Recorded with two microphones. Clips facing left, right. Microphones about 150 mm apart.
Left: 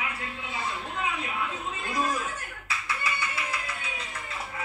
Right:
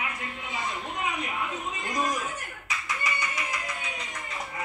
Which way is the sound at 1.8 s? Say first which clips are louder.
Even; 15° right (ahead or behind).